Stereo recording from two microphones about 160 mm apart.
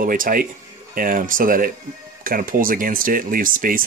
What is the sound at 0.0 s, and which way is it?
Speech, 60° right (ahead or behind).